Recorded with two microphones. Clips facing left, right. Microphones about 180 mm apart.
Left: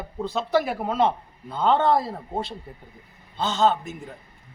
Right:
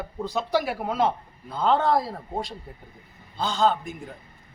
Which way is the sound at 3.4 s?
10° right (ahead or behind).